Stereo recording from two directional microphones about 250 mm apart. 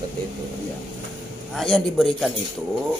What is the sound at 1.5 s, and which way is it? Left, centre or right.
Speech, centre.